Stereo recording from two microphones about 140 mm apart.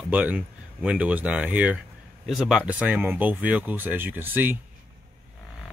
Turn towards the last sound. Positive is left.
turn(degrees=-15)  # may be behind; listen again after turning